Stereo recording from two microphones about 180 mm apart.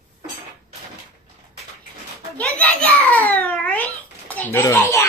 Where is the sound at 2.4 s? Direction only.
10° left (ahead or behind).